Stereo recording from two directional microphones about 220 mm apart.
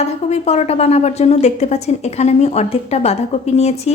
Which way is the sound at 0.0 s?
30° left (ahead or behind).